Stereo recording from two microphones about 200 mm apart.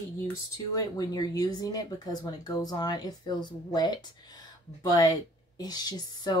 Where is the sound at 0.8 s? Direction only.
20° left (ahead or behind).